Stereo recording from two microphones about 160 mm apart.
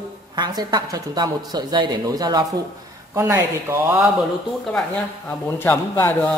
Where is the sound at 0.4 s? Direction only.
25° right (ahead or behind).